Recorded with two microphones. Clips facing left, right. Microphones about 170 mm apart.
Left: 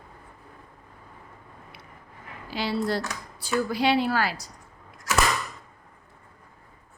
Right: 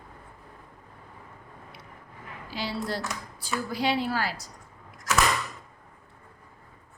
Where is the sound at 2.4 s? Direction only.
65° left (ahead or behind).